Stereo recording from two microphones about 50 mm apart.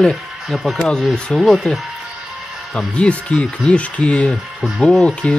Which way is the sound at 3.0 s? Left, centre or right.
Left.